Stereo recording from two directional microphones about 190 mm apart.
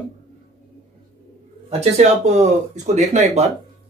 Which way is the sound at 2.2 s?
35° right (ahead or behind).